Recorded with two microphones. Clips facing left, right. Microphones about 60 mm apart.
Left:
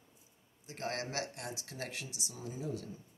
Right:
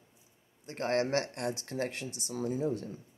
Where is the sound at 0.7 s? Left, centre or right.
Right.